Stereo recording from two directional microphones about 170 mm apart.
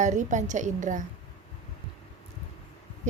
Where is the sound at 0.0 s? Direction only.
45° right (ahead or behind).